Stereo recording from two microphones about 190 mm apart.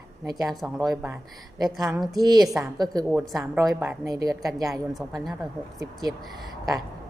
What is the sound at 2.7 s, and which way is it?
Speech, 20° right (ahead or behind).